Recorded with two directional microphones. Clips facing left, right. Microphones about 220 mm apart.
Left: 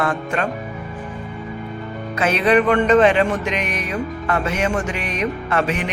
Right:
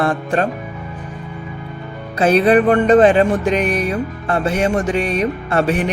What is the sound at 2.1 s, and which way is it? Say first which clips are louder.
Speech: right 4 dB; 35° right (ahead or behind).